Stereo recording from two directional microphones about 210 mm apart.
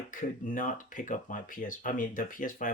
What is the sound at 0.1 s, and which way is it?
Speech, 40° left (ahead or behind).